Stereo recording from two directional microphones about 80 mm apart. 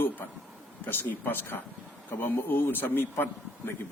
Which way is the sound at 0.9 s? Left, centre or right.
Left.